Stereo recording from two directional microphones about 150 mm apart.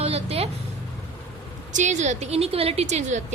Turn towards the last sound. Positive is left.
turn(degrees=-50)  # may be behind; listen again after turning